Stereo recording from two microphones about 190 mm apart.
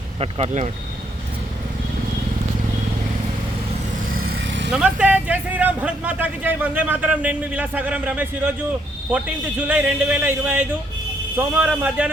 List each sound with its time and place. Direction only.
0.2 s speech: 30° right (ahead or behind)
4.4 s vehicle: 70° right (ahead or behind)
4.7 s speech: 5° right (ahead or behind)